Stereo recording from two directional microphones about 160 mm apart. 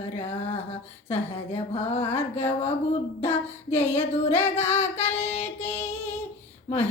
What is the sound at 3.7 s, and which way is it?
Female singing, 15° left (ahead or behind).